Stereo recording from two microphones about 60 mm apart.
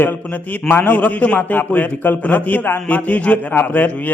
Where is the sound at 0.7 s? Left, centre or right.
Left.